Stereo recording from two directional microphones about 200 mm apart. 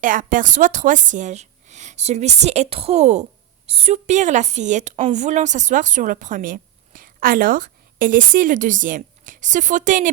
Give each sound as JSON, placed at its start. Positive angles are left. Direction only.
{"t": 0.0, "sound": "a woman's voice", "side_deg": -40}